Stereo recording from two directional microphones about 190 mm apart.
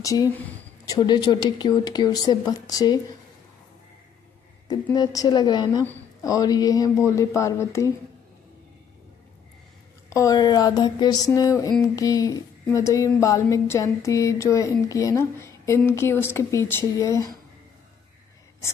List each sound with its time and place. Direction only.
0.0 s speech: 20° left (ahead or behind)
4.9 s speech: 20° left (ahead or behind)
10.1 s speech: 20° left (ahead or behind)